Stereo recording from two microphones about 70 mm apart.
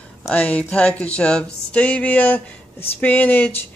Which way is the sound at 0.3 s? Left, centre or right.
Left.